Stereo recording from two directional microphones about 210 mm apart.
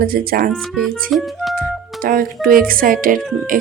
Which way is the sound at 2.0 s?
45° right (ahead or behind).